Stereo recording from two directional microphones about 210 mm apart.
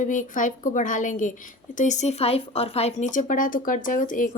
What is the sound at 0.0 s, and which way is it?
Speech, 40° left (ahead or behind).